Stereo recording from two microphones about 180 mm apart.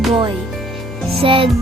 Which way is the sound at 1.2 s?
30° right (ahead or behind).